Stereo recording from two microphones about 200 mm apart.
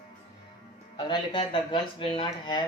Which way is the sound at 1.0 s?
25° left (ahead or behind).